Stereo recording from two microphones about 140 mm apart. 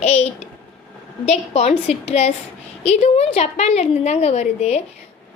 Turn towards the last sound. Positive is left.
turn(degrees=50)  # may be behind; listen again after turning